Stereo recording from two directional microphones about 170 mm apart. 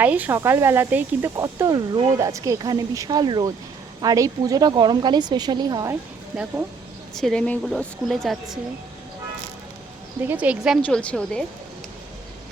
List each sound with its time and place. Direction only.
0.0 s a woman's voice: 10° right (ahead or behind)
7.2 s a woman's voice: 5° left (ahead or behind)
10.2 s speech: 10° right (ahead or behind)
10.8 s a woman's voice: 5° left (ahead or behind)